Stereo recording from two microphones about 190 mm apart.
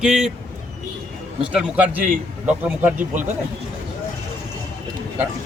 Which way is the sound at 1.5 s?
5° right (ahead or behind).